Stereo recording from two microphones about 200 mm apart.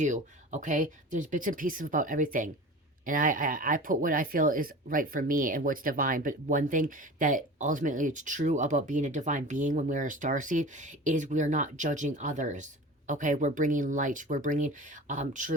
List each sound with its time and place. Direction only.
0.0 s speech: 40° right (ahead or behind)